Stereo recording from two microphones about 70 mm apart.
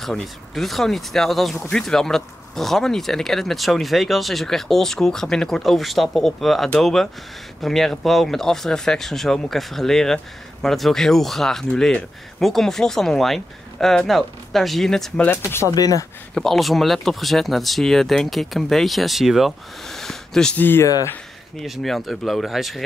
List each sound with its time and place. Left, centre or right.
0.0 s speech: centre
15.3 s speech: left
15.7 s speech: left
16.3 s speech: centre
20.5 s speech: left
21.6 s speech: centre